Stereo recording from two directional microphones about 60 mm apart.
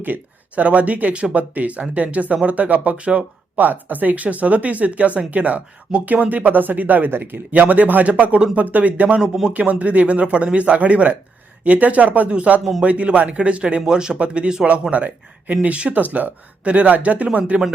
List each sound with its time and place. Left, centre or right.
0.0 s speech: right
9.2 s a man's voice: centre
9.5 s speech: right